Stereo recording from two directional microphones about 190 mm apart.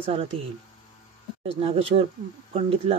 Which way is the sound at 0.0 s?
30° right (ahead or behind).